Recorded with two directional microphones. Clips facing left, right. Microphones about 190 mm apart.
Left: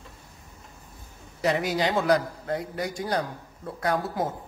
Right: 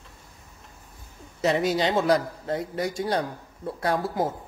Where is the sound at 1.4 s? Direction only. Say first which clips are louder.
Right 2 dB; 25° right (ahead or behind).